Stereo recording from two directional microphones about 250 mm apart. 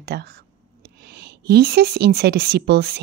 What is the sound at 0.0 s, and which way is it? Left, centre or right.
A woman's voice, right.